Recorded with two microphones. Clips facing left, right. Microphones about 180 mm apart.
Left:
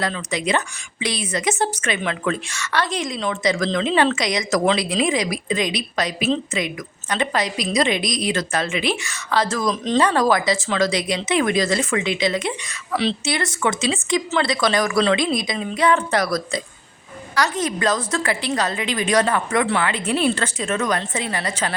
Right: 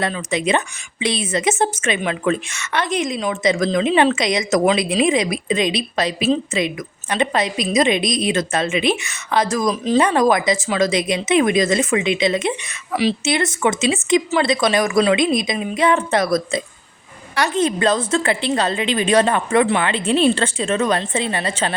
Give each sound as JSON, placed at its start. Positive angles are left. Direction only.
{"t": 0.1, "sound": "a woman's voice", "side_deg": -25}
{"t": 9.6, "sound": "speech", "side_deg": -5}
{"t": 10.2, "sound": "a woman's voice", "side_deg": -20}